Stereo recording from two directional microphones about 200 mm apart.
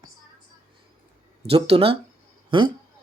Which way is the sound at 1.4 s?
30° right (ahead or behind).